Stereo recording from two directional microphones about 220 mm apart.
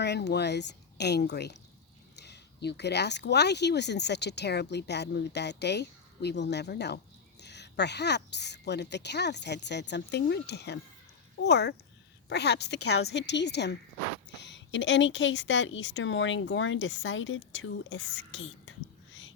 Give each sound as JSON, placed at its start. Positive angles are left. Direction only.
{"t": 0.0, "sound": "a woman's voice", "side_deg": 50}